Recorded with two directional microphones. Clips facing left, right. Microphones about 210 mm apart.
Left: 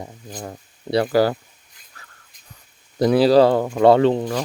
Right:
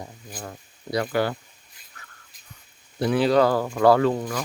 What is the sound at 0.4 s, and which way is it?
Speech, 30° left (ahead or behind).